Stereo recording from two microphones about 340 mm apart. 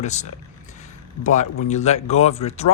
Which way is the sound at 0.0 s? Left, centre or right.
Centre.